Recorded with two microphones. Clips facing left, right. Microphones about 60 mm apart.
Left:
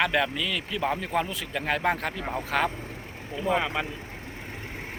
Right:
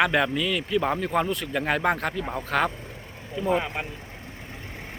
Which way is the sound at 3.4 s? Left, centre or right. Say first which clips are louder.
Right 1 dB; left.